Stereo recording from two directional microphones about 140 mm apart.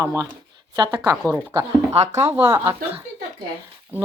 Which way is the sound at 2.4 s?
20° right (ahead or behind).